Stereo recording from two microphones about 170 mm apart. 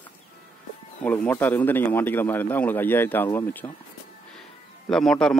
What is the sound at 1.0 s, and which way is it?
Speech, 10° left (ahead or behind).